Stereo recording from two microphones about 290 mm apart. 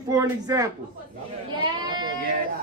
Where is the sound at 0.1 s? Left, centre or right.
Centre.